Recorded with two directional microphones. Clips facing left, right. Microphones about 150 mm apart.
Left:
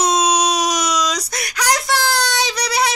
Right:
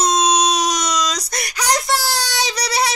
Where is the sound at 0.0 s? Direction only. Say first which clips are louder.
Even; 10° left (ahead or behind).